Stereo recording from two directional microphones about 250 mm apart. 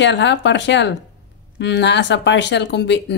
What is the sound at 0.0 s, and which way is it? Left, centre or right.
Speech, left.